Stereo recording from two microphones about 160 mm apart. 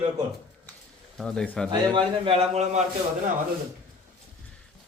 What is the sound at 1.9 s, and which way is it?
Speech, 30° right (ahead or behind).